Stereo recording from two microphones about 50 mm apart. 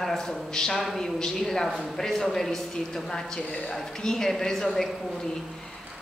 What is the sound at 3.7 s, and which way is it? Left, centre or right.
Speech, centre.